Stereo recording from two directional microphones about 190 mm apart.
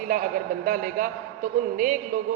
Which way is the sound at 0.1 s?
45° right (ahead or behind).